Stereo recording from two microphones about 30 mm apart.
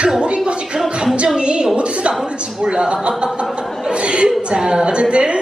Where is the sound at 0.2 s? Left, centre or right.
Right.